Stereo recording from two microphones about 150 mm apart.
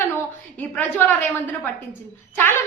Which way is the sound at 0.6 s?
10° left (ahead or behind).